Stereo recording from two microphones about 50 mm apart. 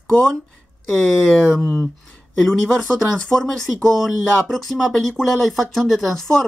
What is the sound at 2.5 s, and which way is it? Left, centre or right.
Speech, centre.